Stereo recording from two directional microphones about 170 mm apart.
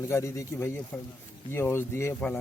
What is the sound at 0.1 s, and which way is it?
Speech, 15° left (ahead or behind).